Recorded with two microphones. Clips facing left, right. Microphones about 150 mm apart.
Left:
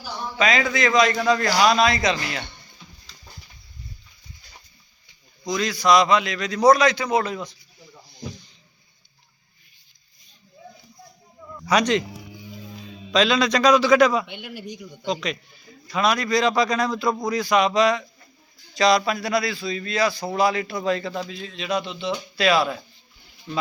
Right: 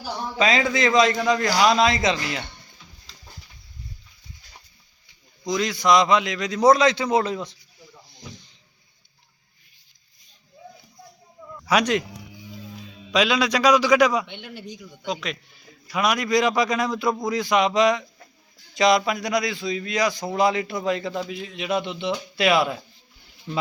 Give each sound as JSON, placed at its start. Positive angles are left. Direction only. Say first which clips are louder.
{"t": 0.0, "sound": "a man's voice", "louder": "right 1 dB", "side_deg": -30}
{"t": 5.5, "sound": "a man's voice", "louder": "even", "side_deg": -20}
{"t": 11.6, "sound": "a man's voice", "louder": "left 1 dB", "side_deg": -5}
{"t": 13.1, "sound": "a man's voice", "louder": "left 1 dB", "side_deg": -10}
{"t": 14.3, "sound": "a man's voice", "louder": "left 2 dB", "side_deg": 10}
{"t": 15.0, "sound": "a man's voice", "louder": "left 3 dB", "side_deg": -5}